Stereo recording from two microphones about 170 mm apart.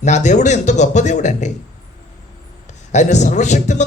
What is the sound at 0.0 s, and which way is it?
Speech, 45° left (ahead or behind).